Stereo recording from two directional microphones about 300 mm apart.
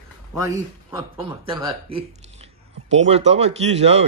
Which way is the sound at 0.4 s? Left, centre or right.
Centre.